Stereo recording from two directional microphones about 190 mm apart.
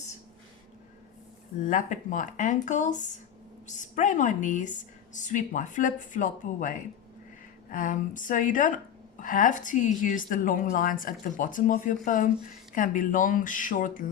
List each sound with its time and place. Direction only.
1.5 s a woman's voice: 40° left (ahead or behind)